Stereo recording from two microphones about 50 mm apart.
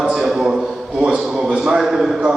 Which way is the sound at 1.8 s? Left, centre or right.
Centre.